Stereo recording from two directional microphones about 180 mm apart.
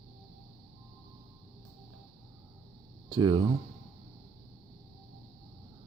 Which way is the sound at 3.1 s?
25° right (ahead or behind).